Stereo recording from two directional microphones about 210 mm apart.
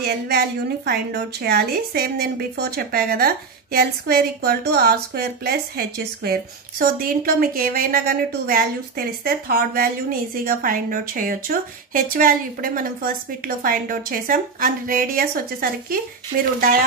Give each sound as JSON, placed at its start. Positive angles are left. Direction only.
{"t": 0.0, "sound": "a woman's voice", "side_deg": -50}